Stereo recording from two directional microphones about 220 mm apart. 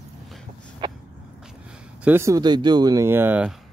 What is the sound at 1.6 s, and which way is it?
Speech, 10° right (ahead or behind).